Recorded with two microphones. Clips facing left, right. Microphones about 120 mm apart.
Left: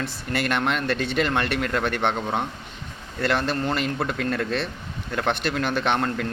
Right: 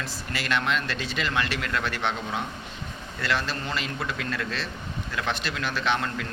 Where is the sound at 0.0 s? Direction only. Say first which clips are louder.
Left 6 dB; 55° left (ahead or behind).